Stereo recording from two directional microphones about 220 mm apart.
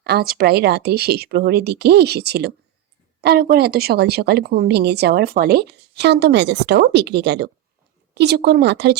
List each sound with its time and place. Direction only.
0.0 s a woman's voice: 45° right (ahead or behind)